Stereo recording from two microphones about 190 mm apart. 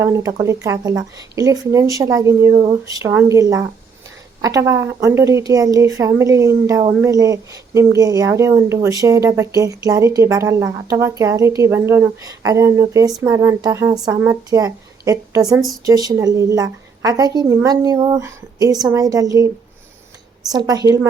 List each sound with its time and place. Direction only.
0.0 s a woman's voice: 15° right (ahead or behind)
20.5 s a woman's voice: 20° right (ahead or behind)